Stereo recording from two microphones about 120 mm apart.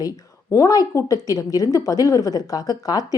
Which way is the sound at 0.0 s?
25° left (ahead or behind).